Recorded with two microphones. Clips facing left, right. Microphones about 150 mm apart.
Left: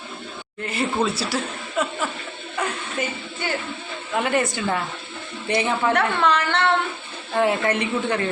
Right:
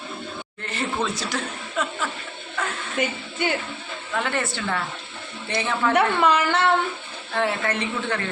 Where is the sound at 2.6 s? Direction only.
15° left (ahead or behind).